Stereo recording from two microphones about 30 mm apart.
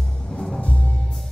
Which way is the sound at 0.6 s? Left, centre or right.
Left.